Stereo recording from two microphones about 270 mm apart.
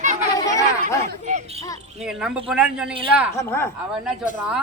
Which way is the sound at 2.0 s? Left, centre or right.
Centre.